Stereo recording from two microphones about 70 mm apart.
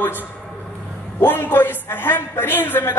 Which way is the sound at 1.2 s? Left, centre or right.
Left.